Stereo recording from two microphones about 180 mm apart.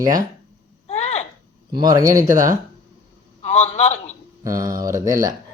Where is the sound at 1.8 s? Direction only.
20° right (ahead or behind).